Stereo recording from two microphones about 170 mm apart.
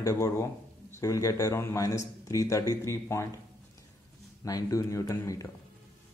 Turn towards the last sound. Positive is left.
turn(degrees=20)  # may be behind; listen again after turning